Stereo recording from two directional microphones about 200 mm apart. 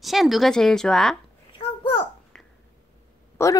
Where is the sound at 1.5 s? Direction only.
25° left (ahead or behind).